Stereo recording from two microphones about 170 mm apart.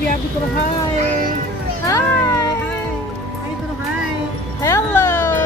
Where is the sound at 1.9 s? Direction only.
20° left (ahead or behind).